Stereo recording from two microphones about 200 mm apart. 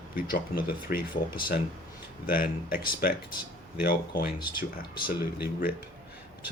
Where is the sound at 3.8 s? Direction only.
50° left (ahead or behind).